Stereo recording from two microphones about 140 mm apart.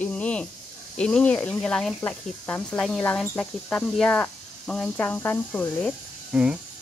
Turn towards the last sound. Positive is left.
turn(degrees=-10)  # may be behind; listen again after turning